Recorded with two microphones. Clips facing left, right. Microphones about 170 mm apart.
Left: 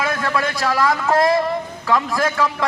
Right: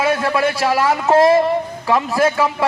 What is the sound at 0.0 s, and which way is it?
A man's voice, 15° right (ahead or behind).